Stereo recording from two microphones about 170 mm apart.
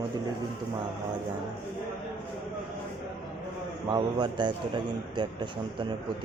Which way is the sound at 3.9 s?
25° right (ahead or behind).